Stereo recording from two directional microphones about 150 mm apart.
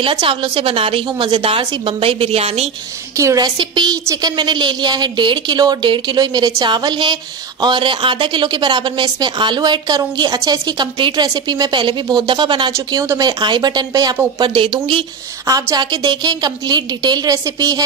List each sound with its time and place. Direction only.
0.0 s a woman's voice: 35° right (ahead or behind)
3.2 s a woman's voice: 25° right (ahead or behind)
12.7 s a woman's voice: 15° right (ahead or behind)